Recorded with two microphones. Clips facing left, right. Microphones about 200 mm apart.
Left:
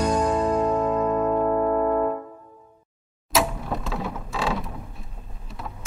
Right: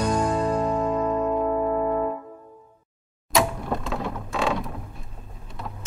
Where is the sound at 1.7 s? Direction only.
5° right (ahead or behind).